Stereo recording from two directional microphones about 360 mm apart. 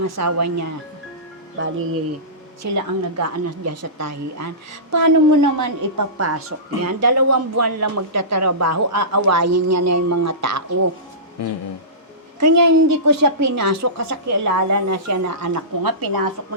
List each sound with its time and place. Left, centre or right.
0.0 s a woman's voice: right
1.5 s speech: right
2.7 s a woman's voice: right
12.4 s a woman's voice: right